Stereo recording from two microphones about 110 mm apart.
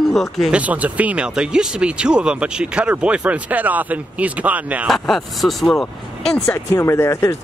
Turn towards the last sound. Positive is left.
turn(degrees=25)  # may be behind; listen again after turning